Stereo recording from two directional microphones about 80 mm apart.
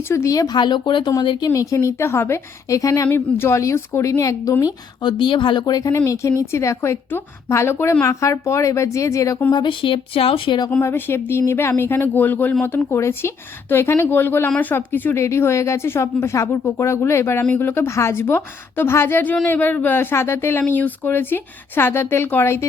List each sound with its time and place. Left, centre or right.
0.1 s speech: left
1.5 s speech: left
3.1 s speech: left
5.0 s speech: left
6.1 s speech: left
9.5 s speech: left
10.8 s speech: left